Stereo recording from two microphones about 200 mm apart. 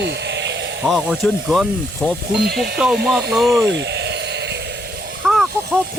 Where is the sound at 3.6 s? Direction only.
60° right (ahead or behind).